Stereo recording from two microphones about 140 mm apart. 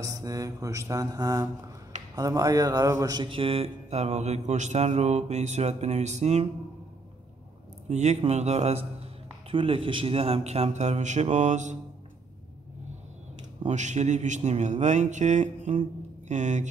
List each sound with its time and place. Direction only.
0.0 s mantra: 25° right (ahead or behind)
3.3 s mantra: 40° right (ahead or behind)
7.9 s mantra: 55° right (ahead or behind)
9.5 s mantra: 40° right (ahead or behind); by 11.8 s 60° right (ahead or behind)
13.7 s speech: 55° right (ahead or behind)